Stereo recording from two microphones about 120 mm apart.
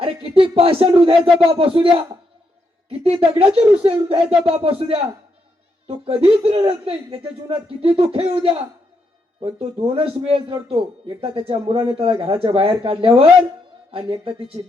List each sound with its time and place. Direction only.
0.0 s a man's voice: 50° right (ahead or behind)
2.9 s a man's voice: 55° right (ahead or behind)
6.1 s a man's voice: 55° right (ahead or behind)